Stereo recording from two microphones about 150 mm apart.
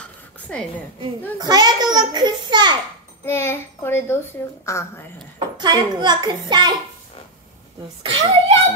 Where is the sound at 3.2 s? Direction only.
15° left (ahead or behind).